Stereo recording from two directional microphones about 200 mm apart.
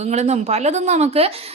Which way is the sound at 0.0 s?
35° right (ahead or behind).